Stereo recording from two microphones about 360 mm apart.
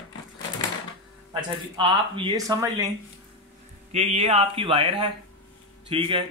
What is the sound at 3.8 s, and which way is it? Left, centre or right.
Speech, centre.